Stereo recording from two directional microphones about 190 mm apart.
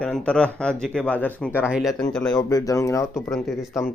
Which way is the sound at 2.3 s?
20° left (ahead or behind).